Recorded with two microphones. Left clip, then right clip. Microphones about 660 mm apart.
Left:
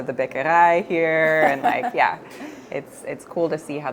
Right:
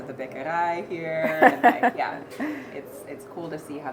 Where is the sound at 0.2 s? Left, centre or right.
Left.